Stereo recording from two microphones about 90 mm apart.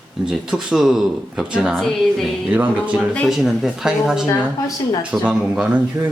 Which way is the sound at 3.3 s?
5° right (ahead or behind).